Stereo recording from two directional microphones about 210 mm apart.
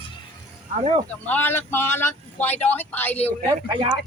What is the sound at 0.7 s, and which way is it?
Speech, 30° right (ahead or behind).